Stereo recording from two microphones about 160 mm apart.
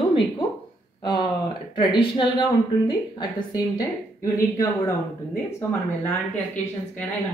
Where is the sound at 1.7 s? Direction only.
30° left (ahead or behind).